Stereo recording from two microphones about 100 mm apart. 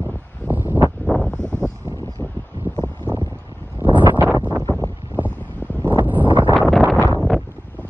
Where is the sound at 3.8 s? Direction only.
20° right (ahead or behind).